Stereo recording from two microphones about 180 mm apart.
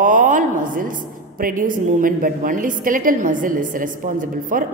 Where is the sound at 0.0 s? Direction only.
45° right (ahead or behind).